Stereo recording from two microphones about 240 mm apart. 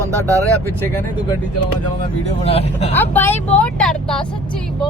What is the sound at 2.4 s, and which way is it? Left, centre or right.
Speech, left.